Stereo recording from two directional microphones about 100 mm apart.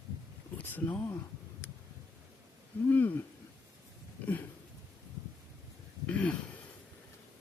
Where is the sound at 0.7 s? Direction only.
20° left (ahead or behind).